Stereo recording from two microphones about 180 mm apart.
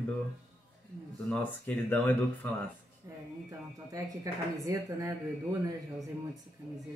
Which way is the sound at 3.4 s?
20° right (ahead or behind).